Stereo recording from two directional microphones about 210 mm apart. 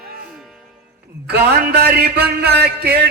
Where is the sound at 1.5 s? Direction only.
50° right (ahead or behind).